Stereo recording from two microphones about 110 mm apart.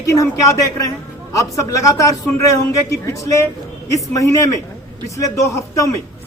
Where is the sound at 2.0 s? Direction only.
30° left (ahead or behind).